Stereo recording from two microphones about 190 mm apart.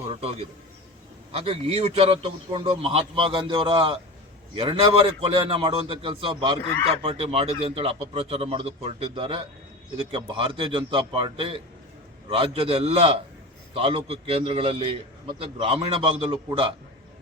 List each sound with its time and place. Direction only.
0.1 s a man's voice: 30° right (ahead or behind)